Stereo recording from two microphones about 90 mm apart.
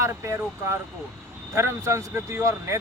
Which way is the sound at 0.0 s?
30° right (ahead or behind).